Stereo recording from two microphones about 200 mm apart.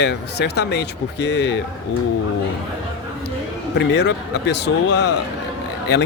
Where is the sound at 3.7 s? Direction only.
60° left (ahead or behind).